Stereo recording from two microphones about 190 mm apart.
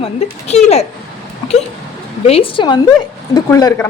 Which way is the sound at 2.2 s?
30° left (ahead or behind).